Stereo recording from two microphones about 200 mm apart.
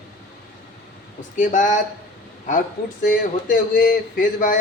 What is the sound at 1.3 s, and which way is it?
Speech, 40° left (ahead or behind).